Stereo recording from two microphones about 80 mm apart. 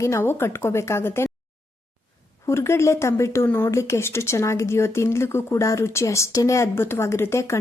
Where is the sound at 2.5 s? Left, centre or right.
Left.